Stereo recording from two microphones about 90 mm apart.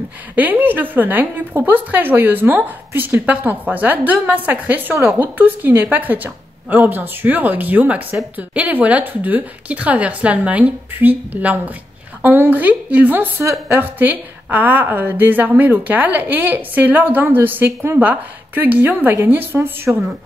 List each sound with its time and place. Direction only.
0.4 s a woman's voice: 20° right (ahead or behind)
13.4 s a woman's voice: 35° right (ahead or behind)
13.7 s a woman's voice: 20° right (ahead or behind)